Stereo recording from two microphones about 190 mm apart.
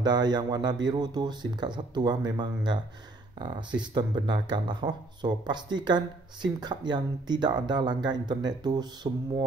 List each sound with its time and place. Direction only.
0.0 s speech: 20° right (ahead or behind)